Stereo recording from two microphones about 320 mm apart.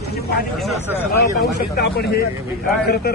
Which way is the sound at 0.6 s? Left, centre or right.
Centre.